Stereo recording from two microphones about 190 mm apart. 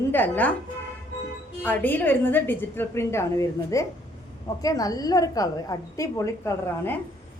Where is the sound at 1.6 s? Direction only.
10° left (ahead or behind).